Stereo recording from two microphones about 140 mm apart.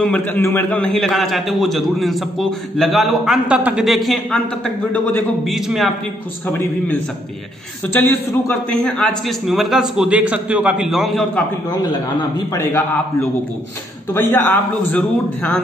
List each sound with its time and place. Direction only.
0.0 s a man's voice: 10° left (ahead or behind)
4.9 s a man's voice: 10° left (ahead or behind)
5.5 s a man's voice: centre (ahead or behind)
7.9 s a man's voice: 15° left (ahead or behind)
9.5 s a man's voice: centre (ahead or behind)
12.5 s a man's voice: 20° left (ahead or behind)
14.1 s a man's voice: 15° left (ahead or behind)